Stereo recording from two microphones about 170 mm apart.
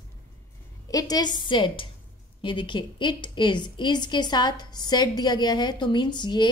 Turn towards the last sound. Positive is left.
turn(degrees=25)  # may be behind; listen again after turning